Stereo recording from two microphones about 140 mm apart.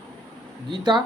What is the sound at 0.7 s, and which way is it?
Speech, 30° right (ahead or behind).